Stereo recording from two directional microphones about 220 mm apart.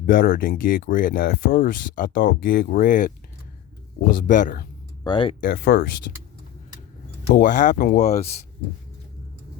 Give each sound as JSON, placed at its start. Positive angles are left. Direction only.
{"t": 0.0, "sound": "speech", "side_deg": 40}
{"t": 4.3, "sound": "speech", "side_deg": 35}
{"t": 5.0, "sound": "speech", "side_deg": 20}
{"t": 5.4, "sound": "speech", "side_deg": 45}
{"t": 7.3, "sound": "speech", "side_deg": 40}